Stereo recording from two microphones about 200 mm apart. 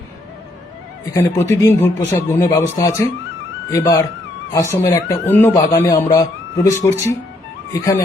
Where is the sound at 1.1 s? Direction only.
15° left (ahead or behind).